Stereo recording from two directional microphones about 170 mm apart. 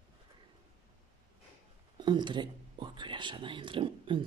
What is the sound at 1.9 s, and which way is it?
Speech, 25° right (ahead or behind).